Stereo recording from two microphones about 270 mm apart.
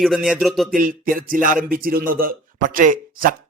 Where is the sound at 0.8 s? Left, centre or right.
Right.